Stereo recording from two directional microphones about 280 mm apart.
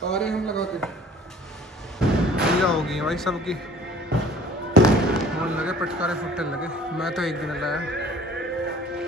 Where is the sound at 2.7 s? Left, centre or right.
Centre.